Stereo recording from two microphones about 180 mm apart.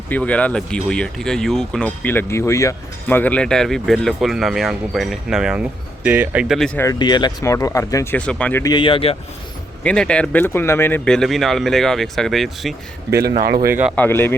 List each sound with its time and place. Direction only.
0.1 s speech: 5° left (ahead or behind)
6.7 s speech: 20° left (ahead or behind)
8.6 s speech: 25° left (ahead or behind)
9.8 s speech: 5° left (ahead or behind)
13.1 s speech: 60° right (ahead or behind)
13.9 s speech: 10° left (ahead or behind)